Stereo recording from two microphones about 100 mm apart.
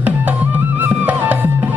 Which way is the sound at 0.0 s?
15° right (ahead or behind).